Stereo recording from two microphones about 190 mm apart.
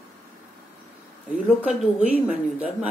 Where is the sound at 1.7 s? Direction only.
5° right (ahead or behind).